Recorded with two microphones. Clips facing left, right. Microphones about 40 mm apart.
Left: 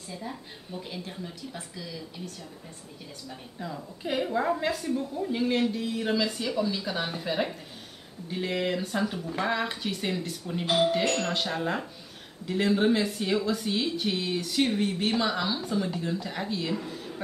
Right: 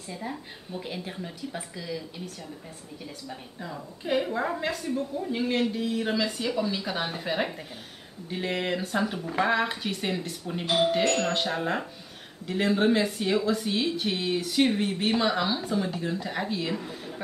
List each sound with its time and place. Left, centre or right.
0.7 s a woman's voice: centre
3.3 s a woman's voice: centre